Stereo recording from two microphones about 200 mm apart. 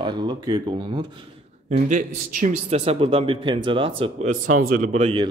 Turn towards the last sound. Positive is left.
turn(degrees=-35)  # may be behind; listen again after turning